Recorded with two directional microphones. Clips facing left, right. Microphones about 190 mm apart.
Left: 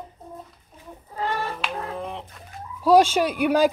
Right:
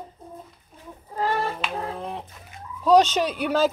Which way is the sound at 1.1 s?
40° right (ahead or behind).